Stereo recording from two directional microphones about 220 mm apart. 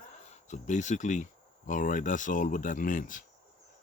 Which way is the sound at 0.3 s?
35° left (ahead or behind).